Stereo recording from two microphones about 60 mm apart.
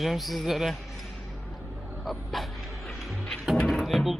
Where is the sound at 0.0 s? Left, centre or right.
Centre.